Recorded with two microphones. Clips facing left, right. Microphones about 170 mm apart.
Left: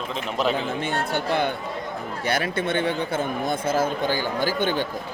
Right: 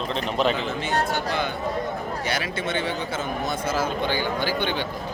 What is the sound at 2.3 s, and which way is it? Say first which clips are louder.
Speech: left 5 dB; 55° left (ahead or behind).